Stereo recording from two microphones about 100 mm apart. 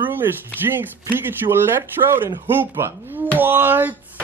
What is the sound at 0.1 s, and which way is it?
Speech, 20° right (ahead or behind).